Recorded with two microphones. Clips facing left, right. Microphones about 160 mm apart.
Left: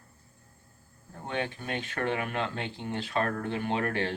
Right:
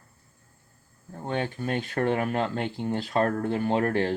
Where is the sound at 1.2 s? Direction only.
40° right (ahead or behind).